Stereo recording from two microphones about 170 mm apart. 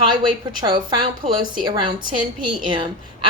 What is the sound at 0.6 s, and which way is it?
A woman's voice, 25° right (ahead or behind).